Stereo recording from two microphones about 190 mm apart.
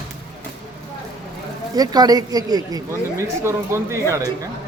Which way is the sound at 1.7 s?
20° right (ahead or behind).